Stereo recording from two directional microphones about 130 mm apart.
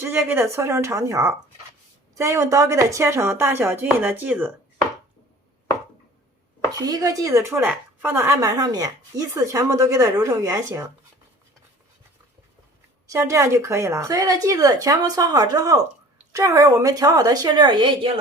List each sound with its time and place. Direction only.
0.0 s speech: 15° right (ahead or behind)
6.7 s speech: 30° right (ahead or behind)
13.1 s speech: 25° right (ahead or behind); by 18.1 s 40° right (ahead or behind)